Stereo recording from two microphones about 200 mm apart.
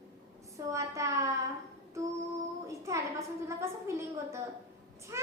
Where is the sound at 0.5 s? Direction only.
15° right (ahead or behind).